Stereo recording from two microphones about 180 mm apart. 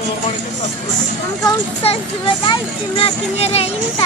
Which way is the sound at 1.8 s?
30° left (ahead or behind).